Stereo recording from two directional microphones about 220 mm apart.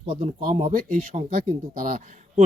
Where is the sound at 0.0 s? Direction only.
25° right (ahead or behind).